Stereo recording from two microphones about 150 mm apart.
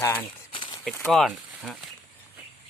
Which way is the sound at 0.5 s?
35° left (ahead or behind).